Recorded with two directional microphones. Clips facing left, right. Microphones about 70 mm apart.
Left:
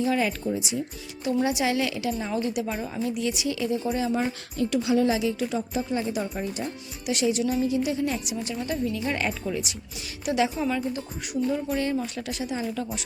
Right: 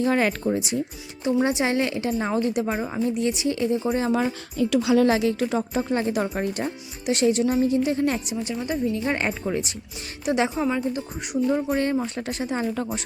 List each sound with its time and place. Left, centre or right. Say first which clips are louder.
0.0 s speech: right 3 dB; right
1.2 s a woman's voice: right 3 dB; right
4.7 s a woman's voice: right 4 dB; right
8.9 s a woman's voice: right 3 dB; right
10.7 s speech: right 3 dB; right
11.5 s a woman's voice: right 4 dB; right